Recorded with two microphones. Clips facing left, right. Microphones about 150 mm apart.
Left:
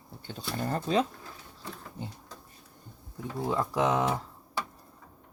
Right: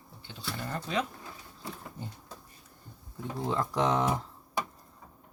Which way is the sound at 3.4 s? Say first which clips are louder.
Left 1 dB; 5° left (ahead or behind).